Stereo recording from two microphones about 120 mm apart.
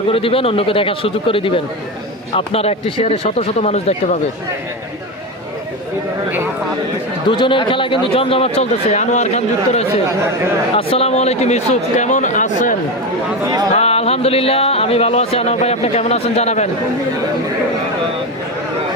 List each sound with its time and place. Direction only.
0.1 s a man's voice: 50° left (ahead or behind)
7.3 s a man's voice: 45° left (ahead or behind); by 9.8 s 75° left (ahead or behind)
10.8 s speech: 55° left (ahead or behind); by 12.7 s 90° left
13.7 s speech: 60° left (ahead or behind)